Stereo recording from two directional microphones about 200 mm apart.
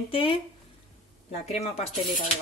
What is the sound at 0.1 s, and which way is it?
Speech, 25° left (ahead or behind).